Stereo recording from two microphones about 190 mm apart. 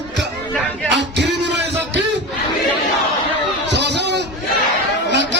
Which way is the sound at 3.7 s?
65° right (ahead or behind).